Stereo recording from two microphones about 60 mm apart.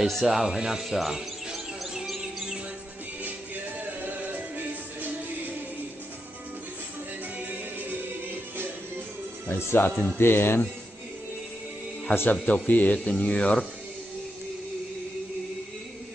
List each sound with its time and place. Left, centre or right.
0.0 s music: centre
4.0 s music: right
9.5 s speech: left
12.1 s speech: left